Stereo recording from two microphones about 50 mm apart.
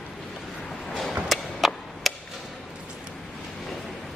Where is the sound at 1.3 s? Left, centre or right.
Centre.